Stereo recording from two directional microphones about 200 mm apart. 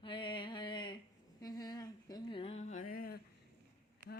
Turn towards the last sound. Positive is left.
turn(degrees=45)  # may be behind; listen again after turning